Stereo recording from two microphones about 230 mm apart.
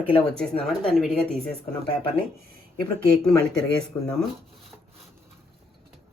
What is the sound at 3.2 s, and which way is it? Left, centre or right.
Speech, centre.